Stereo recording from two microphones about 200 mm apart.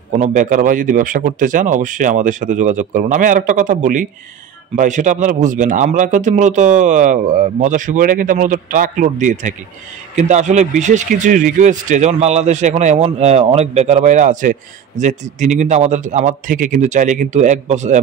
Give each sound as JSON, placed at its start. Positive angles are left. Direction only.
{"t": 0.2, "sound": "speech", "side_deg": -35}